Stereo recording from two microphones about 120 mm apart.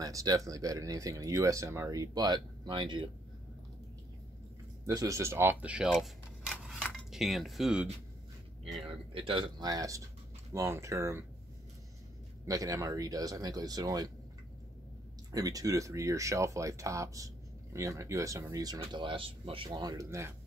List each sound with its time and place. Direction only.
0.0 s speech: 30° right (ahead or behind)
4.8 s speech: 25° right (ahead or behind); by 6.1 s 5° right (ahead or behind)
6.6 s dishes: centre (ahead or behind)
8.8 s speech: 50° right (ahead or behind)
9.6 s speech: 30° right (ahead or behind)
12.4 s speech: 30° right (ahead or behind)
15.3 s speech: 30° right (ahead or behind)
18.8 s speech: 45° right (ahead or behind); by 20.3 s 25° right (ahead or behind)